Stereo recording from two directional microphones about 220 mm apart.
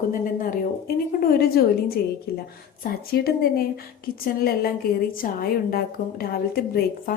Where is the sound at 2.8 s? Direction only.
45° left (ahead or behind).